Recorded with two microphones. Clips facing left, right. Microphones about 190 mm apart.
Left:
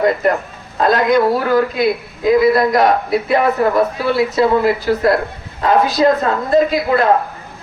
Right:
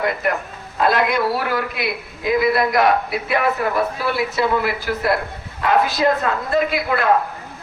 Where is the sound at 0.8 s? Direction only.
40° left (ahead or behind).